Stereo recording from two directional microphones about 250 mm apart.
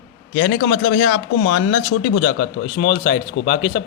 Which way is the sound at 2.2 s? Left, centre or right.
Left.